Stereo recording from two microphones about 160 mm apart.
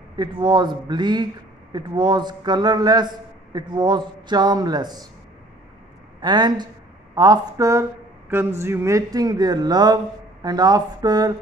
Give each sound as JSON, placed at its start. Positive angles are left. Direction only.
{"t": 0.1, "sound": "speech", "side_deg": -30}
{"t": 6.2, "sound": "speech", "side_deg": -25}